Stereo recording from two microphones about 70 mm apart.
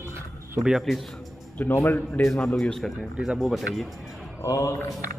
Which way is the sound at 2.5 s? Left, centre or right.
Centre.